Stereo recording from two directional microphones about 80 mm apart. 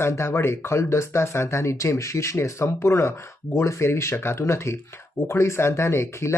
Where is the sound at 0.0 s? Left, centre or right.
Left.